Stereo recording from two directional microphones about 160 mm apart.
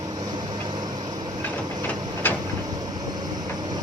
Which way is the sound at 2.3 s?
10° left (ahead or behind).